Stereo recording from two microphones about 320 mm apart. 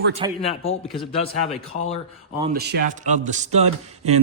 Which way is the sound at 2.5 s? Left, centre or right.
Right.